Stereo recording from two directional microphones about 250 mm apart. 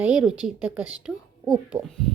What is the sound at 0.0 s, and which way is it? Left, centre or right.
A woman's voice, centre.